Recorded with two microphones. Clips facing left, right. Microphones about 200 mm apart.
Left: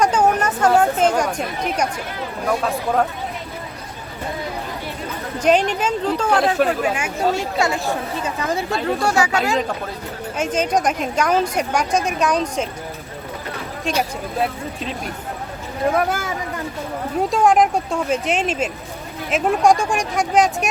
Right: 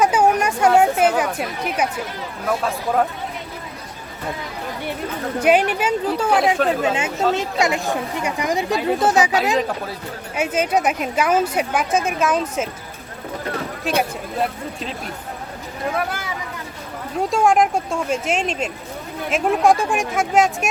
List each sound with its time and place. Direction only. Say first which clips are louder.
0.0 s a sound: even; 10° right (ahead or behind)
0.8 s speech: right 1 dB; 5° right (ahead or behind)
5.4 s speech: even; 10° right (ahead or behind)
6.8 s speech: right 1 dB; 25° right (ahead or behind)
10.3 s speech: even; 10° right (ahead or behind)
13.9 s speech: even; 5° right (ahead or behind)
15.9 s speech: left 5 dB; 45° left (ahead or behind)
17.2 s speech: left 1 dB; centre (ahead or behind)